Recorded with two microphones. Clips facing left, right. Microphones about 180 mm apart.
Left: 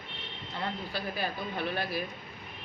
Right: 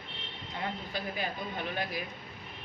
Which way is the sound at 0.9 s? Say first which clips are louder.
Left 1 dB; 15° right (ahead or behind).